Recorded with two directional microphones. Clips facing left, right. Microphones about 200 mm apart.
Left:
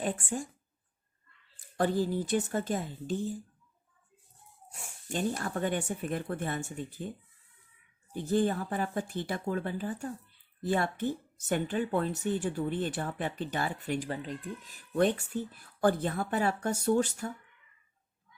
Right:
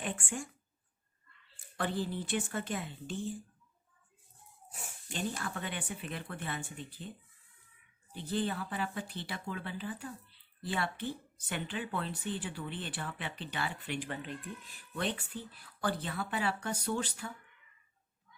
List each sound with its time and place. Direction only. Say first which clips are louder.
0.0 s speech: left 5 dB; 35° left (ahead or behind)
1.7 s speech: left 7 dB; 45° left (ahead or behind)
4.7 s speech: even; 5° right (ahead or behind)
5.0 s a woman's voice: left 6 dB; 45° left (ahead or behind)
8.1 s a woman's voice: left 7 dB; 45° left (ahead or behind)